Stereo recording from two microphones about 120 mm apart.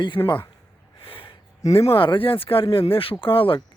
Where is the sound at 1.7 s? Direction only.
50° left (ahead or behind).